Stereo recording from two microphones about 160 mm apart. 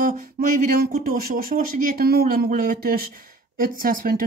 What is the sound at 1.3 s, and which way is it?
Speech, 65° right (ahead or behind).